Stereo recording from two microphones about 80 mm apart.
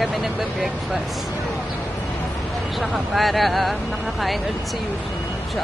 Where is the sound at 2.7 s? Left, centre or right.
Centre.